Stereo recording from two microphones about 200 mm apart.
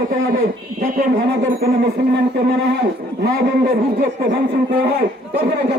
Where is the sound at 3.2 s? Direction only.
50° right (ahead or behind).